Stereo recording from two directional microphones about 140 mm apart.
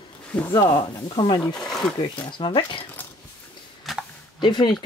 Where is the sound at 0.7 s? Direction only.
30° left (ahead or behind).